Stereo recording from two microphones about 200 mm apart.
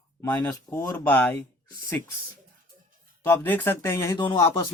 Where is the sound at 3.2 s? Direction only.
10° left (ahead or behind).